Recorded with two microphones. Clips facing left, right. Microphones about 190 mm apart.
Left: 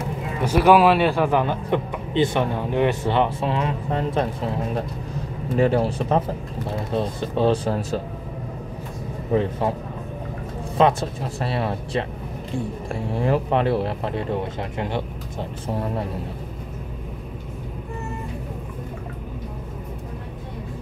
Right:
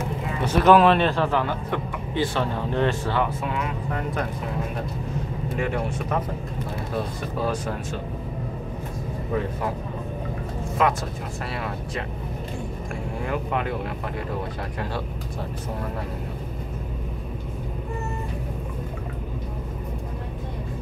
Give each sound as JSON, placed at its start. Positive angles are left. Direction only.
{"t": 0.4, "sound": "a man's voice", "side_deg": 10}
{"t": 5.6, "sound": "speech", "side_deg": 30}
{"t": 9.3, "sound": "speech", "side_deg": 25}
{"t": 10.8, "sound": "speech", "side_deg": 30}
{"t": 13.1, "sound": "speech", "side_deg": 30}